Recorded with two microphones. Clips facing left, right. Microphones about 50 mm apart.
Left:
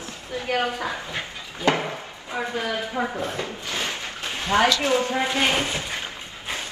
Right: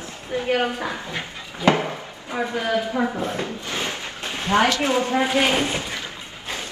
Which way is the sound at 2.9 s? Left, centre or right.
Right.